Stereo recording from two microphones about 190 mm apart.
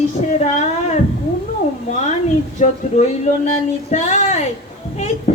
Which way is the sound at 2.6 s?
40° left (ahead or behind).